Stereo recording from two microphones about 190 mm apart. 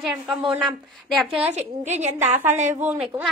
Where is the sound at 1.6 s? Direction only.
40° right (ahead or behind).